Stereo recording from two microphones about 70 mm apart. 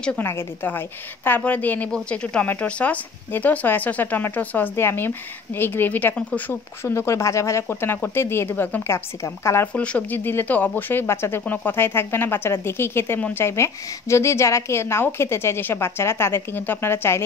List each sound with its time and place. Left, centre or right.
0.2 s a woman's voice: left
6.8 s speech: left
7.6 s a woman's voice: left
9.7 s speech: centre; by 11.4 s left
11.4 s a woman's voice: left